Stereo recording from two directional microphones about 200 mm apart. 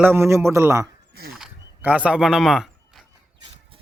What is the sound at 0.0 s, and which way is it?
Speech, 10° right (ahead or behind).